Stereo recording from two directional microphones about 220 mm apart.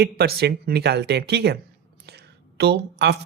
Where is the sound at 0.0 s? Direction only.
45° right (ahead or behind).